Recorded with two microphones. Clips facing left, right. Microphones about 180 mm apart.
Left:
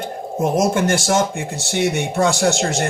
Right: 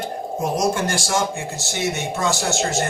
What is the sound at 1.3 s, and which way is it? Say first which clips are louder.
Speech: left 4 dB; 60° left (ahead or behind).